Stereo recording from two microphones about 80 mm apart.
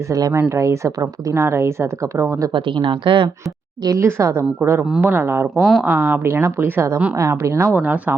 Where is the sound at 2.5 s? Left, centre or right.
Right.